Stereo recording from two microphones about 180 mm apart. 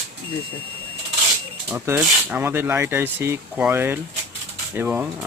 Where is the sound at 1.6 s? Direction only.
10° right (ahead or behind).